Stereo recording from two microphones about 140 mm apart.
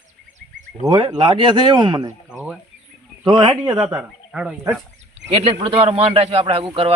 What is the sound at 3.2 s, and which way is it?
Speech, 30° right (ahead or behind).